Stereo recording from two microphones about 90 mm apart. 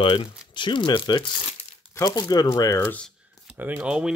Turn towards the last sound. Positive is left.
turn(degrees=-10)  # may be behind; listen again after turning